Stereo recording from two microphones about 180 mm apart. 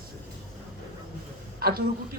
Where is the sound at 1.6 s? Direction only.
55° right (ahead or behind).